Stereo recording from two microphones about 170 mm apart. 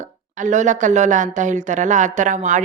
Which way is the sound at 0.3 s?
45° right (ahead or behind).